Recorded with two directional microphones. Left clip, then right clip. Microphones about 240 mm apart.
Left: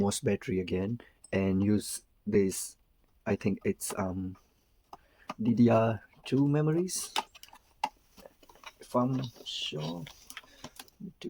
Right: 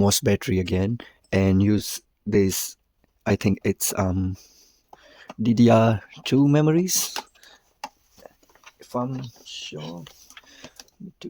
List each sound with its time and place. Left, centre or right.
0.0 s speech: right
4.9 s a sound: right
5.4 s speech: right
8.8 s speech: right